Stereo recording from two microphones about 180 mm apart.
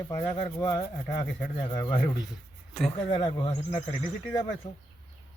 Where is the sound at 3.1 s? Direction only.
25° left (ahead or behind).